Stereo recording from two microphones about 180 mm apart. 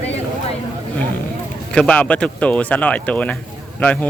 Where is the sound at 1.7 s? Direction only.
5° left (ahead or behind).